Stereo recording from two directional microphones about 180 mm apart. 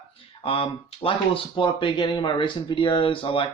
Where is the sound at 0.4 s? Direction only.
30° left (ahead or behind).